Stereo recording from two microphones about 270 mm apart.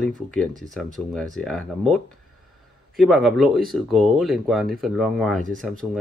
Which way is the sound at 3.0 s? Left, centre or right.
Centre.